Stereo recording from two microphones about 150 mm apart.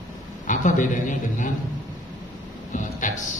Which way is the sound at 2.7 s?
55° left (ahead or behind).